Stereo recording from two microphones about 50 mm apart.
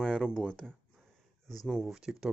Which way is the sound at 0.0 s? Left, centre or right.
Centre.